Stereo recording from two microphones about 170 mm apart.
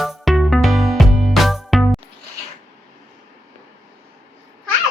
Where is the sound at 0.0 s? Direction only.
Centre (ahead or behind).